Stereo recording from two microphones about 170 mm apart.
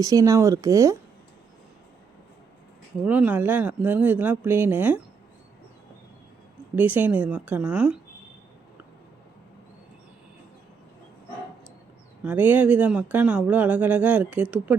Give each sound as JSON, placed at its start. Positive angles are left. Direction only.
{"t": 0.0, "sound": "speech", "side_deg": -20}
{"t": 3.0, "sound": "speech", "side_deg": -10}
{"t": 6.7, "sound": "speech", "side_deg": -10}
{"t": 12.2, "sound": "speech", "side_deg": -10}